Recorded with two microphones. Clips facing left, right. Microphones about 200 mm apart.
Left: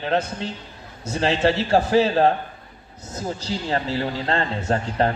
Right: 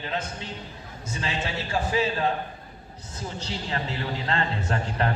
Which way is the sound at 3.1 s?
40° left (ahead or behind).